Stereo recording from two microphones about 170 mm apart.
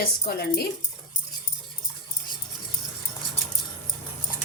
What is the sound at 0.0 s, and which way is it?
Speech, 65° left (ahead or behind).